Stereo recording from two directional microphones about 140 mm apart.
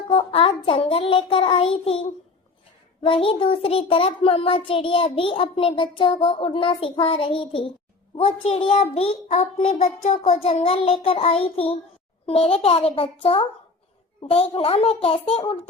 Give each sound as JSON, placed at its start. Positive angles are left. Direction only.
{"t": 0.1, "sound": "a child's voice", "side_deg": 40}
{"t": 3.0, "sound": "a child's voice", "side_deg": 40}